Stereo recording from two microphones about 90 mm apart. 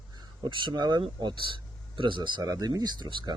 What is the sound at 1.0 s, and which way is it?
Speech, 65° right (ahead or behind).